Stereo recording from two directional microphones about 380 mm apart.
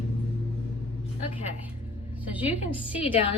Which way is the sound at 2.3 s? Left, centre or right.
Centre.